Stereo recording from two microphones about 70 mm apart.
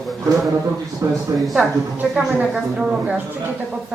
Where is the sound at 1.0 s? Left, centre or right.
Right.